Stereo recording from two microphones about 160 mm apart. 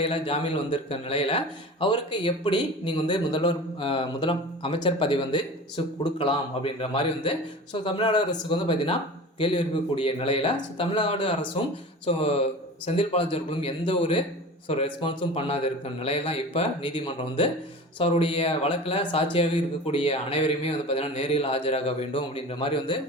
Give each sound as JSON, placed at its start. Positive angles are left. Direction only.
{"t": 0.0, "sound": "a man's voice", "side_deg": 35}